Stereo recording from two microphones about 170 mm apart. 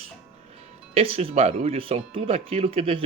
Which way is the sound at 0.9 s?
35° right (ahead or behind).